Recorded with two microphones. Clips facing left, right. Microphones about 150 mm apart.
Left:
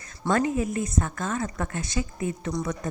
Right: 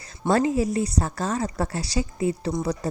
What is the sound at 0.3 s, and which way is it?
Speech, 35° right (ahead or behind).